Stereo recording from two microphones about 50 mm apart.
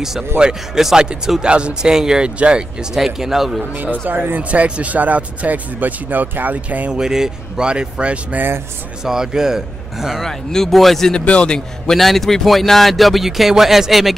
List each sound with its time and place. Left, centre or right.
0.4 s speech: centre
4.3 s speech: right
6.9 s speech: centre
9.0 s speech: centre
10.2 s speech: centre
11.2 s a man's voice: left
11.9 s speech: centre